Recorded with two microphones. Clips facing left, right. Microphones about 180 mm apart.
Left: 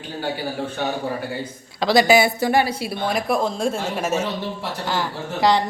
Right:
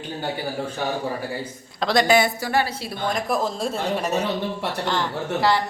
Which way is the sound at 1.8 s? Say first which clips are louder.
Left 3 dB; 5° left (ahead or behind).